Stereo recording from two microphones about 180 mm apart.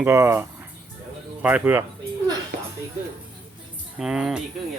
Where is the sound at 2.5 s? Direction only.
75° right (ahead or behind).